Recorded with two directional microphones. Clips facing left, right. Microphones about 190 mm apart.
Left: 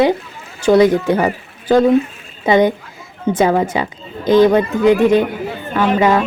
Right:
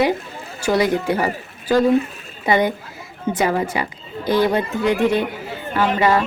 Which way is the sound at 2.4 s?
20° left (ahead or behind).